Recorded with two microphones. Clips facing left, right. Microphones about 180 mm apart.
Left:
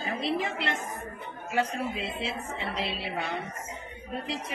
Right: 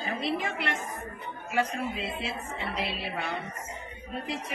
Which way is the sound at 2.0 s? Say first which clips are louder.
Left 1 dB; 25° left (ahead or behind).